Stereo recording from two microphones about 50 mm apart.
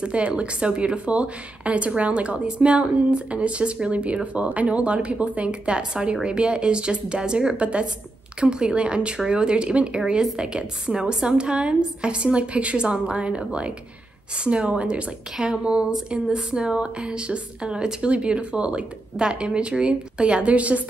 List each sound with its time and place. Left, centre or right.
0.0 s speech: right